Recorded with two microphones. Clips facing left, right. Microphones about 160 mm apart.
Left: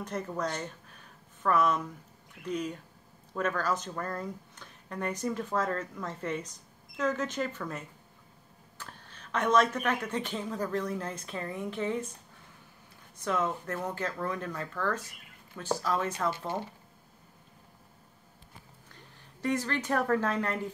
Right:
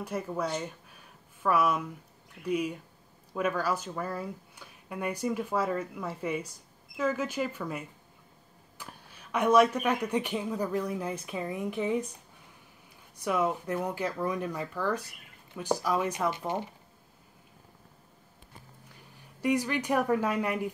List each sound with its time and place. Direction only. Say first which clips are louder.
0.0 s speech: right 1 dB; 10° right (ahead or behind)
13.2 s speech: right 2 dB; 10° right (ahead or behind)
18.9 s a woman's voice: right 1 dB; 10° right (ahead or behind)